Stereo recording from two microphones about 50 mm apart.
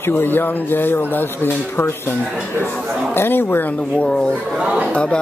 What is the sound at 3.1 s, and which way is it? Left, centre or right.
Speech, left.